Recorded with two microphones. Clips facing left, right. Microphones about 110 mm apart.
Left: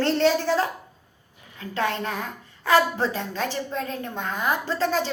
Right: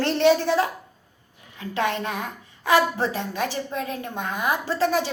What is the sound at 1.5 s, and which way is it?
A woman's voice, 20° right (ahead or behind).